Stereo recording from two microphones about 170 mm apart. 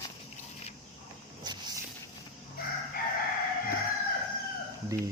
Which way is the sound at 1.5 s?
25° right (ahead or behind).